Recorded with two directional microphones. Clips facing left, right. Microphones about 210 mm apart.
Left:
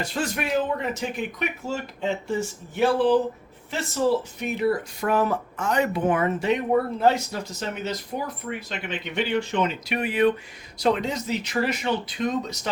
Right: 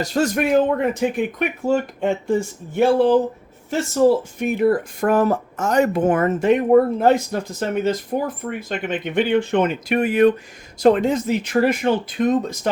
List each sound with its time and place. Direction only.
0.0 s speech: 45° right (ahead or behind)